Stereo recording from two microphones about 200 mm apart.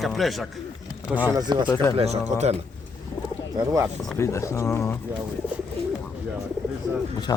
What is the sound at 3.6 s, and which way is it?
Speech, 15° right (ahead or behind).